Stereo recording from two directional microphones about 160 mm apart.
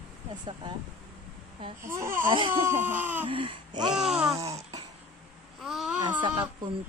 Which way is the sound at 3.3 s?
30° right (ahead or behind).